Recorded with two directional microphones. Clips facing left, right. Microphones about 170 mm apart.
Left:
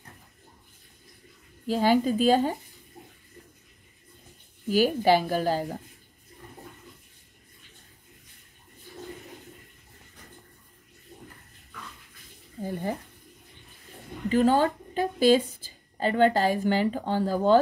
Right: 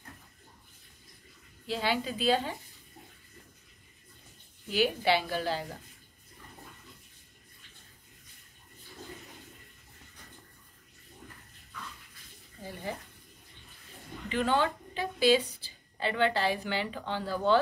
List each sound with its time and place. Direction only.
1.7 s a woman's voice: 45° left (ahead or behind)
4.6 s a woman's voice: 45° left (ahead or behind)
14.3 s a woman's voice: 40° left (ahead or behind)